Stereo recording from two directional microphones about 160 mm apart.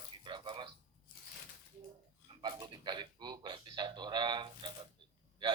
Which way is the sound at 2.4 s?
25° right (ahead or behind).